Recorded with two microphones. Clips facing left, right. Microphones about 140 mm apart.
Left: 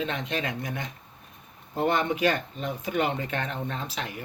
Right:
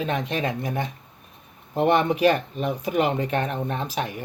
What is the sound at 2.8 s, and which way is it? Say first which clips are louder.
Speech: right 4 dB; 35° right (ahead or behind).